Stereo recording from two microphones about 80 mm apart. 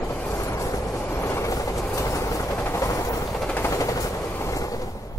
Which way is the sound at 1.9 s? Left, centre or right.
Left.